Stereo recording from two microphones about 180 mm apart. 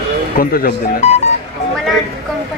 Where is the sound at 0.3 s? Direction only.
55° left (ahead or behind).